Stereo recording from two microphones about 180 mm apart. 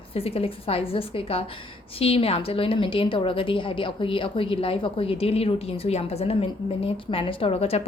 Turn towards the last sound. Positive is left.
turn(degrees=30)  # may be behind; listen again after turning